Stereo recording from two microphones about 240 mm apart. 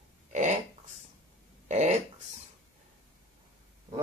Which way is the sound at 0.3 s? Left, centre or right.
Right.